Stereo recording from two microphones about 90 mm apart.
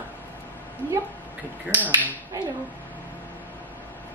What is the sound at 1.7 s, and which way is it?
Speech, 20° right (ahead or behind).